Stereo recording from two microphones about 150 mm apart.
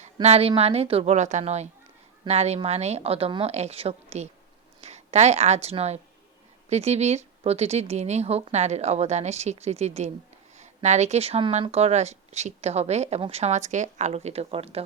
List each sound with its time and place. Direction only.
0.0 s a woman's voice: 45° right (ahead or behind)